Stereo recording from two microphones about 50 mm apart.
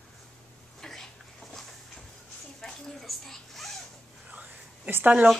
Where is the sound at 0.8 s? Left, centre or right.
Centre.